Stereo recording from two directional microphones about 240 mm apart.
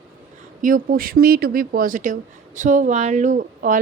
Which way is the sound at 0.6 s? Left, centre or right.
Right.